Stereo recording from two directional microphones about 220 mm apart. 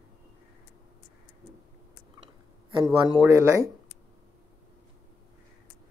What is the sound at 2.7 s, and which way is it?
Speech, 20° right (ahead or behind).